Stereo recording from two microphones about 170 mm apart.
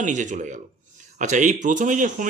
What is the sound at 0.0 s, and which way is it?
Speech, 45° right (ahead or behind).